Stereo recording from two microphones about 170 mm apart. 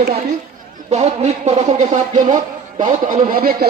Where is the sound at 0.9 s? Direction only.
40° right (ahead or behind).